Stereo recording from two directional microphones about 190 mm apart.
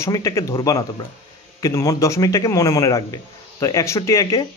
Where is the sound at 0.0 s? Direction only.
15° left (ahead or behind).